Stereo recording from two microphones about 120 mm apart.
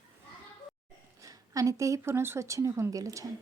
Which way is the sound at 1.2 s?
30° right (ahead or behind).